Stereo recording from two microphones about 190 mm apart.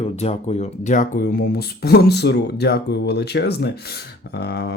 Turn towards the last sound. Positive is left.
turn(degrees=60)  # may be behind; listen again after turning